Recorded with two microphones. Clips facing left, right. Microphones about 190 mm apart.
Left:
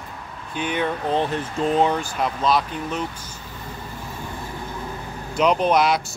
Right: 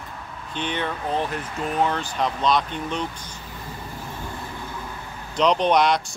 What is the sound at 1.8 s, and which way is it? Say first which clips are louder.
Speech: left 2 dB; 10° left (ahead or behind).